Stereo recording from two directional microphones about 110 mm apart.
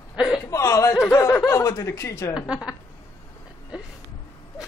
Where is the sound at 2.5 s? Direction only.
10° right (ahead or behind).